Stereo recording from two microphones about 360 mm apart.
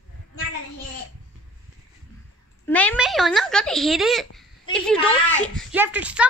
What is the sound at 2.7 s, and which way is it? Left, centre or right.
A woman's voice, centre.